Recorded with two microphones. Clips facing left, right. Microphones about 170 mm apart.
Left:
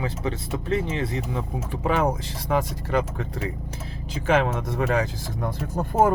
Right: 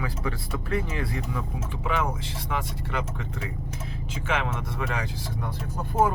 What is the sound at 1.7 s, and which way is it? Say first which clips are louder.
Speech: left 6 dB; 40° left (ahead or behind).